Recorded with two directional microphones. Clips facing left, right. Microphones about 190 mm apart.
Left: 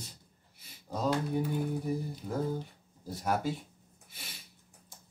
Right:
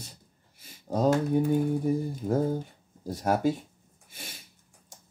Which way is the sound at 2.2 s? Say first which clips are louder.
Right 7 dB; 45° right (ahead or behind).